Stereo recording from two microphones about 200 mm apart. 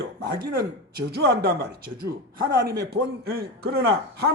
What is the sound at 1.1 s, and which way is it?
Speech, 55° right (ahead or behind).